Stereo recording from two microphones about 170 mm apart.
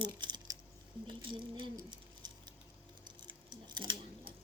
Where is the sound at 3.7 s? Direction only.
25° right (ahead or behind).